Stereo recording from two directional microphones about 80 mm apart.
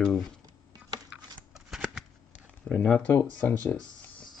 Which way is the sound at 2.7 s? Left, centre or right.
Centre.